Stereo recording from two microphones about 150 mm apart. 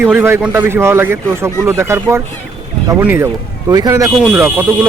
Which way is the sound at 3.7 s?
25° right (ahead or behind).